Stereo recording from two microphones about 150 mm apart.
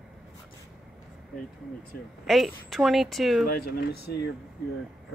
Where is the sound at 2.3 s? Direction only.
Centre (ahead or behind).